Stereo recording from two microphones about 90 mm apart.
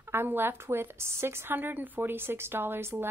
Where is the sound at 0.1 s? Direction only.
25° right (ahead or behind).